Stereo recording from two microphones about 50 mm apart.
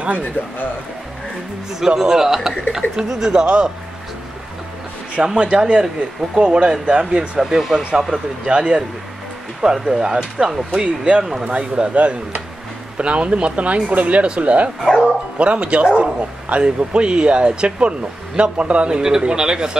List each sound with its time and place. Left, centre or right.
2.0 s speech: centre
5.1 s a man's voice: right
8.1 s a man's voice: centre